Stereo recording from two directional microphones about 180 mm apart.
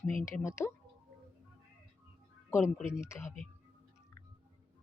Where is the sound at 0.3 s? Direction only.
15° left (ahead or behind).